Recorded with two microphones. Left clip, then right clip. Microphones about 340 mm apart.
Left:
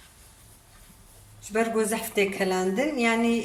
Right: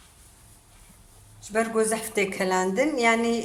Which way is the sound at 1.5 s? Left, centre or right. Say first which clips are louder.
Right 1 dB; centre.